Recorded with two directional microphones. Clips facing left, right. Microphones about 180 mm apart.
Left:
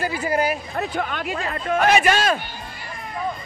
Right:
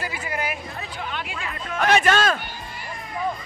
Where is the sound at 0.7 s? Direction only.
50° left (ahead or behind).